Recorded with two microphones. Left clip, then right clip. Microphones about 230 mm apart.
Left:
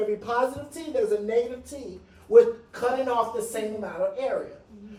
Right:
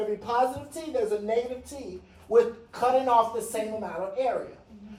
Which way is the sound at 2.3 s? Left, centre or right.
Right.